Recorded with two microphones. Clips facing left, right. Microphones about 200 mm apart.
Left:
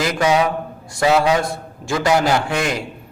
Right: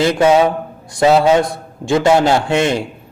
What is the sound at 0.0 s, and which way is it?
A man's voice, 30° right (ahead or behind).